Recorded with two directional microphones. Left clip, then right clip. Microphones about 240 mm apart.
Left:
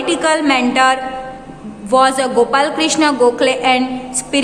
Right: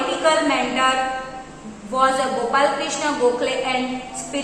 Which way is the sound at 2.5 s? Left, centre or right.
Left.